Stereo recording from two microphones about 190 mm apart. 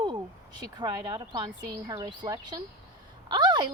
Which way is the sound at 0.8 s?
20° right (ahead or behind).